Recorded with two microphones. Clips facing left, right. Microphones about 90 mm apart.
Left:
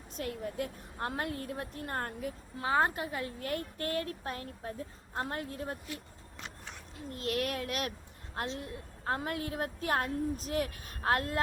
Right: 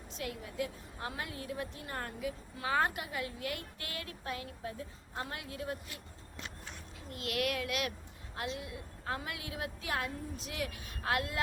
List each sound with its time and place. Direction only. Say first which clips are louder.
0.2 s a woman's voice: left 3 dB; 45° left (ahead or behind)
2.6 s a woman's voice: left 3 dB; 30° left (ahead or behind)
7.1 s a woman's voice: left 1 dB; 35° left (ahead or behind)